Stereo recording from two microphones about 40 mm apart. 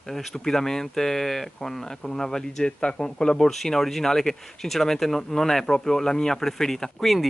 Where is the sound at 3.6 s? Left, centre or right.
Centre.